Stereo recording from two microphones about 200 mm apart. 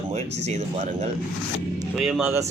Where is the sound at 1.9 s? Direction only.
5° right (ahead or behind).